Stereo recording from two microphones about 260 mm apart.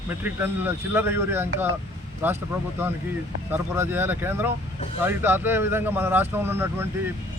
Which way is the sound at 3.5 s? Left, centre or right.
Centre.